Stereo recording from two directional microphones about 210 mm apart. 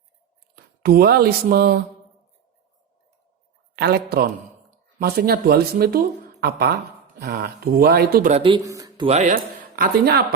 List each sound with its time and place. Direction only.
0.5 s speech: 45° right (ahead or behind)
3.8 s speech: 50° right (ahead or behind)
8.3 s speech: 25° right (ahead or behind)
8.6 s speech: 15° right (ahead or behind)
9.0 s speech: 35° right (ahead or behind)